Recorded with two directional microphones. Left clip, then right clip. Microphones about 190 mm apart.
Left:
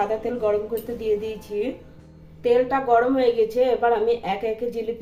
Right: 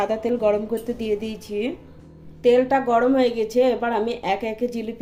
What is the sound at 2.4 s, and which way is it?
A woman's voice, 50° right (ahead or behind).